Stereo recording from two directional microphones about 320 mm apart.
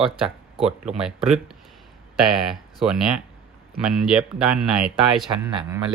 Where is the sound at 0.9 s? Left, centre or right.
Centre.